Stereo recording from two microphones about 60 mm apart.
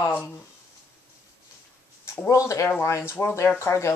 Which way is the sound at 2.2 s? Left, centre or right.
Left.